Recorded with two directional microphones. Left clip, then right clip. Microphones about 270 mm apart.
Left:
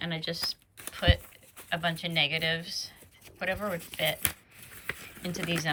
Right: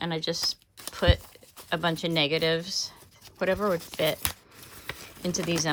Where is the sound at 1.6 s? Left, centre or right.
Centre.